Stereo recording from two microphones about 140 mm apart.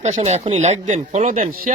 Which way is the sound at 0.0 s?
55° right (ahead or behind).